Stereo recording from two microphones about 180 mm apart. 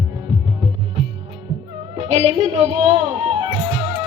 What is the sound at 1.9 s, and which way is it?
Music, 35° right (ahead or behind).